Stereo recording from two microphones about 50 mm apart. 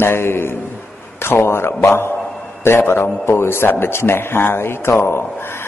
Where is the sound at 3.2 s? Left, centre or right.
Left.